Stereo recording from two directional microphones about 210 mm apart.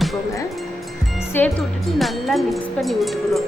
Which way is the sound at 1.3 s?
10° left (ahead or behind).